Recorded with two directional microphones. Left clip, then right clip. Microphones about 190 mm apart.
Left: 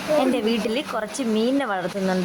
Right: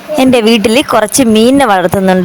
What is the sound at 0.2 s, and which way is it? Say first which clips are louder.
Speech: right 14 dB; 60° right (ahead or behind).